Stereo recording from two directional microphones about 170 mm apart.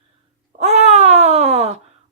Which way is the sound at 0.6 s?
40° right (ahead or behind).